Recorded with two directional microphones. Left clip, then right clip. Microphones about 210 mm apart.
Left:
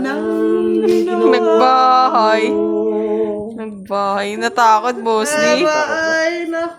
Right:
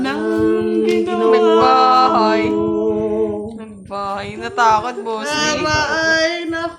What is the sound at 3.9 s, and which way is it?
Speech, 45° left (ahead or behind).